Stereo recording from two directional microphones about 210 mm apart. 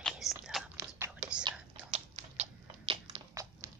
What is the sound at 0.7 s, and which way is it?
Whispering, 10° right (ahead or behind).